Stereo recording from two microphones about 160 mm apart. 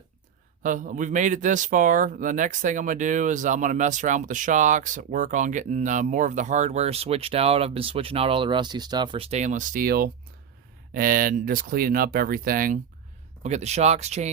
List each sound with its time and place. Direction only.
0.6 s speech: 55° right (ahead or behind)
13.4 s speech: 45° right (ahead or behind)